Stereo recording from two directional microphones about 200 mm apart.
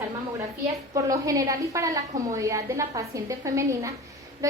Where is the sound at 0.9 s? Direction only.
15° right (ahead or behind).